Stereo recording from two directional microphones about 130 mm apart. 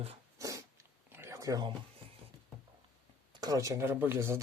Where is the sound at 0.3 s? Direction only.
25° right (ahead or behind).